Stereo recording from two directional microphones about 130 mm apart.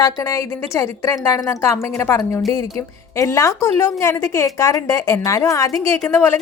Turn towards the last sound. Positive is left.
turn(degrees=20)  # may be behind; listen again after turning